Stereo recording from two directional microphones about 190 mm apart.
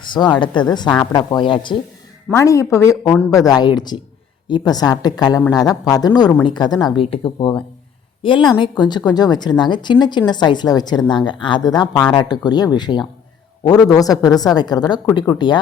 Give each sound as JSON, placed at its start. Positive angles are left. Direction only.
{"t": 0.0, "sound": "speech", "side_deg": 25}